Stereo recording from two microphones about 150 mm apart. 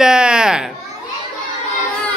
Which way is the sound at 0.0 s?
5° right (ahead or behind).